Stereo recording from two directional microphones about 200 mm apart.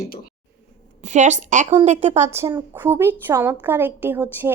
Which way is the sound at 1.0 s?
35° right (ahead or behind).